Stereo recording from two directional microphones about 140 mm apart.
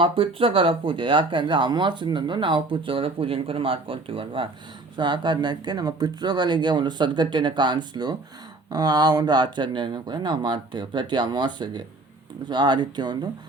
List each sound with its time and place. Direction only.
0.0 s speech: 40° right (ahead or behind)